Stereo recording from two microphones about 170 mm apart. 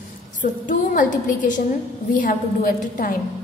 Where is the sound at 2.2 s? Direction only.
55° left (ahead or behind).